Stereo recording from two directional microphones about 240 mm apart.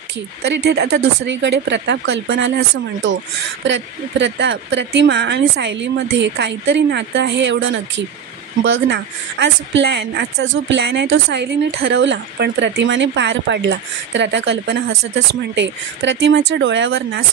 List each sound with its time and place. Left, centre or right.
0.5 s speech: right
3.6 s speech: right